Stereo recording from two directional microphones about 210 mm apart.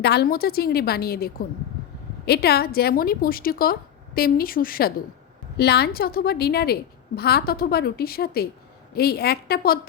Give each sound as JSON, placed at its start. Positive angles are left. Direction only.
{"t": 0.0, "sound": "speech", "side_deg": 50}